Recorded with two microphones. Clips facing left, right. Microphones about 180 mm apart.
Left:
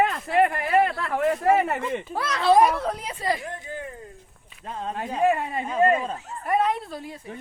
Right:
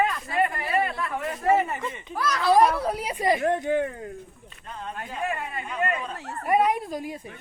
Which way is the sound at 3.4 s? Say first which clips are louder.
Right 12 dB; 70° right (ahead or behind).